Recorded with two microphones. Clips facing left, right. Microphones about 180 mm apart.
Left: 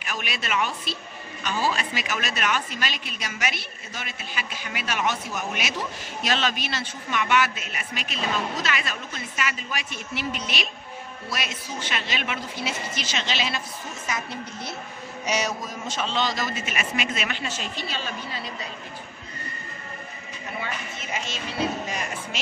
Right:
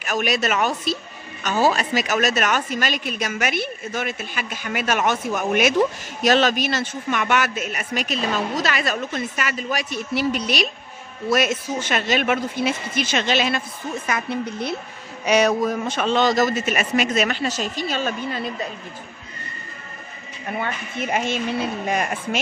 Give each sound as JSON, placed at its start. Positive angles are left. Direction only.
{"t": 0.0, "sound": "a woman's voice", "side_deg": -45}
{"t": 11.2, "sound": "a woman's voice", "side_deg": -50}
{"t": 20.5, "sound": "a woman's voice", "side_deg": -55}